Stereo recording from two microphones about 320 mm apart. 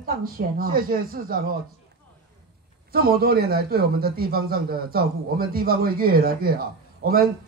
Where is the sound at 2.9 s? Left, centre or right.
Right.